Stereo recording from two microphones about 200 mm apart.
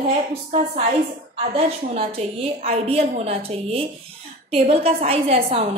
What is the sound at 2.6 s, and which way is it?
A woman's voice, 30° right (ahead or behind).